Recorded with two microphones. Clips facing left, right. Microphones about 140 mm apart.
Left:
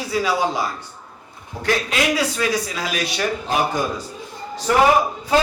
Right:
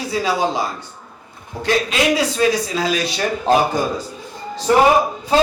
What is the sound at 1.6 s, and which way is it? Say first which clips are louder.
A man's voice: right 3 dB; 25° right (ahead or behind).